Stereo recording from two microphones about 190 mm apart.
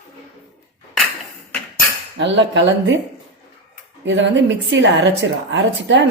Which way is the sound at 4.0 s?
75° right (ahead or behind).